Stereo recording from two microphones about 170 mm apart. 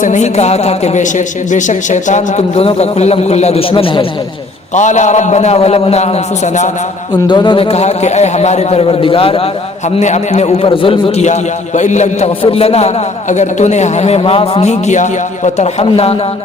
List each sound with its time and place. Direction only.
0.0 s a man's voice: 45° left (ahead or behind)
4.7 s a man's voice: 45° left (ahead or behind)
7.3 s a man's voice: 25° left (ahead or behind)
11.3 s a man's voice: 45° left (ahead or behind)